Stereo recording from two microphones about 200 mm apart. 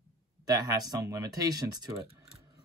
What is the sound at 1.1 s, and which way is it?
Speech, 20° right (ahead or behind).